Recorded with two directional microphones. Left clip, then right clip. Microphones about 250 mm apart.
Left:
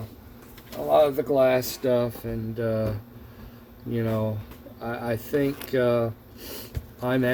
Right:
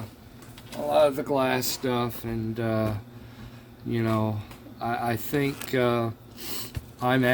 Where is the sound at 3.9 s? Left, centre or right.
Right.